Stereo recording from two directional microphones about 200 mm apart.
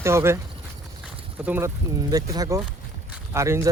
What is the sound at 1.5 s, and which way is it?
Speech, 10° right (ahead or behind).